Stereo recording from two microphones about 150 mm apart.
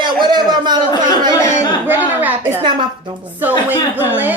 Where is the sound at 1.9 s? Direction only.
10° right (ahead or behind).